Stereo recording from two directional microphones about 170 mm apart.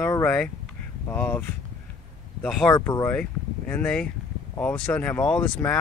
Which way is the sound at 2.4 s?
5° left (ahead or behind).